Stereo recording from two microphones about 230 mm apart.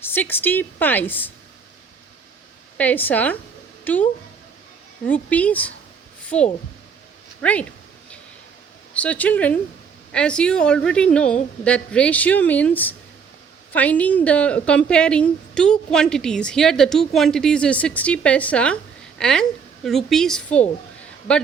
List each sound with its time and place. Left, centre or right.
0.0 s a woman's voice: centre
2.7 s a woman's voice: centre
6.3 s speech: left
7.4 s a woman's voice: centre
9.0 s a woman's voice: centre